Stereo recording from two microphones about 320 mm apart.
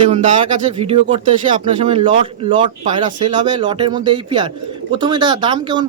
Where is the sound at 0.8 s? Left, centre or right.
Centre.